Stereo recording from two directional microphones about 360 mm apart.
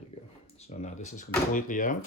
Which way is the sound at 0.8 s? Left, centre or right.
Centre.